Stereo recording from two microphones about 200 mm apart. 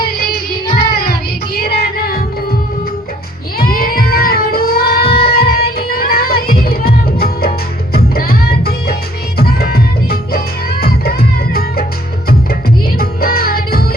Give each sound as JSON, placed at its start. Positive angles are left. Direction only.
{"t": 0.9, "sound": "music", "side_deg": 50}
{"t": 3.6, "sound": "child singing", "side_deg": 50}
{"t": 7.9, "sound": "music", "side_deg": 50}
{"t": 13.0, "sound": "music", "side_deg": 50}